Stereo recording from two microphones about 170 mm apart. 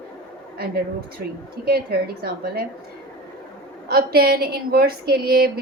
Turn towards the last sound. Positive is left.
turn(degrees=-65)  # may be behind; listen again after turning